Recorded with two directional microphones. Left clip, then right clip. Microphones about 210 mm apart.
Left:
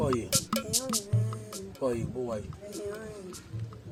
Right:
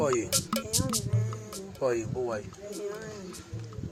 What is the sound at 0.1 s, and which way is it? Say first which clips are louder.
Music: right 1 dB; centre (ahead or behind).